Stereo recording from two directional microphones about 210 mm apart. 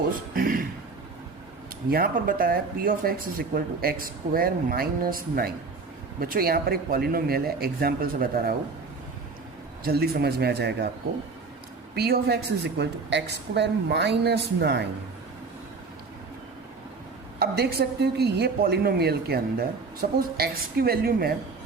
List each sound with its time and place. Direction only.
0.3 s a sound: 45° right (ahead or behind)
1.9 s a woman's voice: 45° right (ahead or behind)
9.8 s a woman's voice: 50° right (ahead or behind)
11.9 s a woman's voice: 50° right (ahead or behind)
17.4 s a woman's voice: 45° right (ahead or behind)